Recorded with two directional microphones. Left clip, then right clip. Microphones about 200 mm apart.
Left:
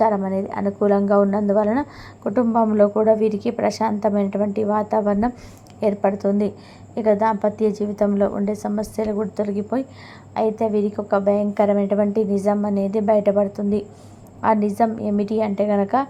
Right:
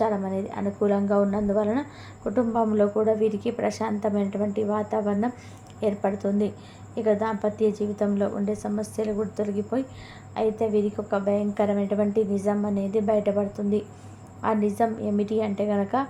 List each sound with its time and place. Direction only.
0.0 s a woman's voice: 25° left (ahead or behind)